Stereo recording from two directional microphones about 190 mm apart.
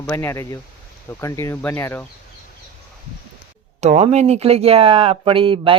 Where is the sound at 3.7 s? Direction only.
35° right (ahead or behind).